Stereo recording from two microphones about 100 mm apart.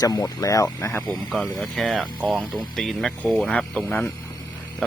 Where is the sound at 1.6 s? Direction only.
5° left (ahead or behind).